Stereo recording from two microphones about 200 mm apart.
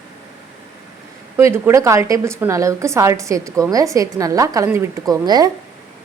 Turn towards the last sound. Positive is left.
turn(degrees=-20)  # may be behind; listen again after turning